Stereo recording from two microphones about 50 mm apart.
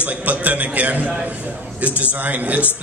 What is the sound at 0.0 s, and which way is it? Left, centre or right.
A man's voice, right.